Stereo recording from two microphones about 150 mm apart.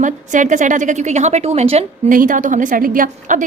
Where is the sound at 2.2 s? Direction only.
60° right (ahead or behind).